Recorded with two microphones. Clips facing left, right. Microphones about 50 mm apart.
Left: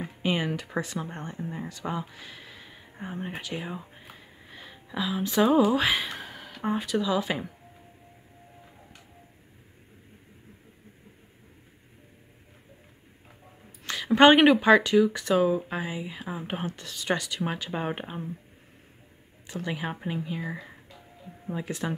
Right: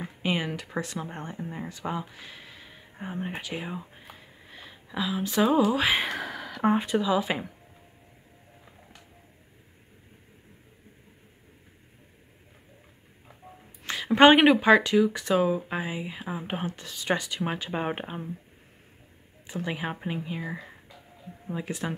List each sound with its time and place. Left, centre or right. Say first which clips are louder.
0.0 s speech: left 1 dB; centre
6.7 s speech: right 2 dB; right
7.0 s speech: right 1 dB; centre
13.8 s speech: even; centre
19.4 s speech: right 1 dB; centre